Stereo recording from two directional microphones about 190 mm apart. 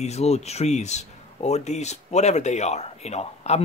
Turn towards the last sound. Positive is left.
turn(degrees=35)  # may be behind; listen again after turning